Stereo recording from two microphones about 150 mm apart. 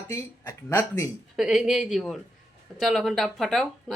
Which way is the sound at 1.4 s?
Centre (ahead or behind).